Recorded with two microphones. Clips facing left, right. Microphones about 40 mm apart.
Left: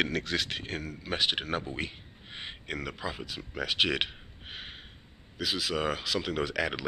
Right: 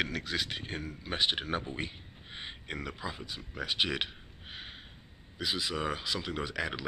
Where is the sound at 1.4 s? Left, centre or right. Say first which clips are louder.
Left 2 dB; centre.